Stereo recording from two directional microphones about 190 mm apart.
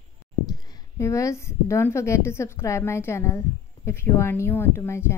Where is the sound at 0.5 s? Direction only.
20° left (ahead or behind).